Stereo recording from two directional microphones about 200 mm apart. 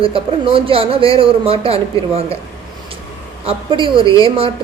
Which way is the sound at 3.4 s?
25° right (ahead or behind).